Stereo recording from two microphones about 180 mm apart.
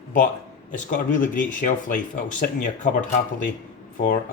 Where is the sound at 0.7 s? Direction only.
45° left (ahead or behind).